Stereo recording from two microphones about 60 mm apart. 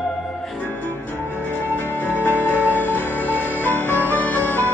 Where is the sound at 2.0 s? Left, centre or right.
Left.